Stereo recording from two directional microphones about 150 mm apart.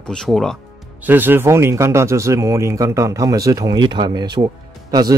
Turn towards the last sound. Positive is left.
turn(degrees=-25)  # may be behind; listen again after turning